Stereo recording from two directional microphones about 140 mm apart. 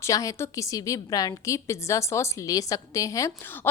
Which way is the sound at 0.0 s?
25° left (ahead or behind).